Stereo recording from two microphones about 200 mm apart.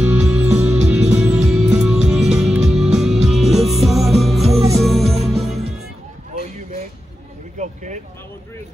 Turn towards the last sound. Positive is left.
turn(degrees=-35)  # may be behind; listen again after turning